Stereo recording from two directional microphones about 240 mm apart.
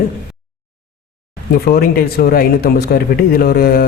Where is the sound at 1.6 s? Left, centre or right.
Left.